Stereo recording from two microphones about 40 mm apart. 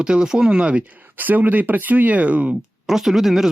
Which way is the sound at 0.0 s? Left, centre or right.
Right.